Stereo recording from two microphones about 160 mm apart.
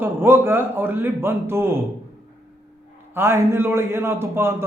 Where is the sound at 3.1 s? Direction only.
15° right (ahead or behind).